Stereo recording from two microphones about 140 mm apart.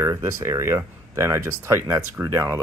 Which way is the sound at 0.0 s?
20° right (ahead or behind).